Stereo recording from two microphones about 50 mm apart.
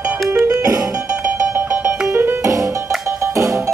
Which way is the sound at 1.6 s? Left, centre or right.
Right.